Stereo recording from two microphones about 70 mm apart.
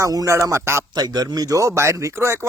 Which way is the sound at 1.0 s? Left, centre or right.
Right.